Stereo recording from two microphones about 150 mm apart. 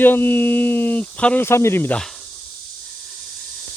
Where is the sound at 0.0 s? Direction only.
15° left (ahead or behind).